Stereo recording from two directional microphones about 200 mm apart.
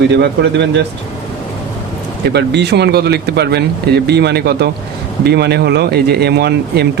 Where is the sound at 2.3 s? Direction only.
55° right (ahead or behind).